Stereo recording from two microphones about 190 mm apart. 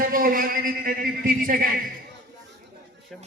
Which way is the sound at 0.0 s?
45° right (ahead or behind).